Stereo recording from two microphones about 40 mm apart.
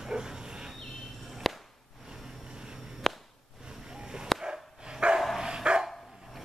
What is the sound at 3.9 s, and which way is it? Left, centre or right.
Dog, centre.